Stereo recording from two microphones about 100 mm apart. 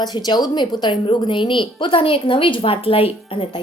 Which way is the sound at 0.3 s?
45° left (ahead or behind).